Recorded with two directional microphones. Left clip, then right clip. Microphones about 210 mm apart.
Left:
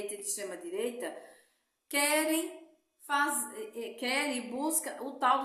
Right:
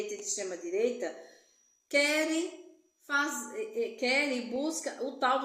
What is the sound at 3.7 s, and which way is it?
A woman's voice, 15° left (ahead or behind).